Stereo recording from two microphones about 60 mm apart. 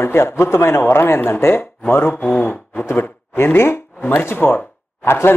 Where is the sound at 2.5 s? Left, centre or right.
Left.